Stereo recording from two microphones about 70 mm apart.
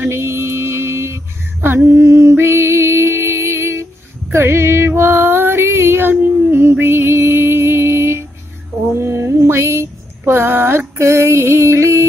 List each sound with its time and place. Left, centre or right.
0.1 s female singing: right
4.3 s music: right
11.0 s music: right